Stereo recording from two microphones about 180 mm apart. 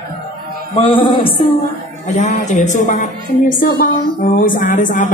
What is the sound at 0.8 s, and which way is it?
Speech, 30° left (ahead or behind).